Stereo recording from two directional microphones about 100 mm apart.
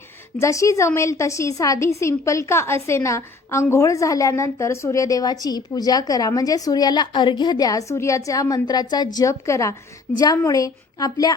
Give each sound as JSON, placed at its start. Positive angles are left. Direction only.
{"t": 0.3, "sound": "a woman's voice", "side_deg": 30}